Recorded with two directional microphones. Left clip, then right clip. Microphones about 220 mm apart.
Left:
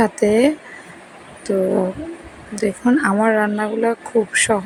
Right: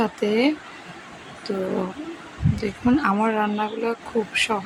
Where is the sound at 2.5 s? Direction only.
15° left (ahead or behind).